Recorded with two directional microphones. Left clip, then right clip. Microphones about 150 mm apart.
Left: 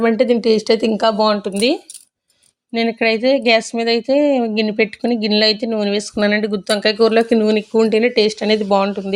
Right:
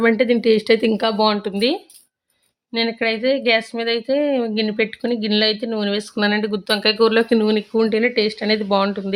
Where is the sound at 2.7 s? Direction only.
20° left (ahead or behind).